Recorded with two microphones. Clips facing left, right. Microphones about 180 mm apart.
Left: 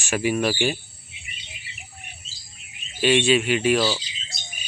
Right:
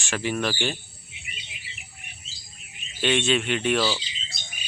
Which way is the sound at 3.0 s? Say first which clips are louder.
Left 4 dB; 5° left (ahead or behind).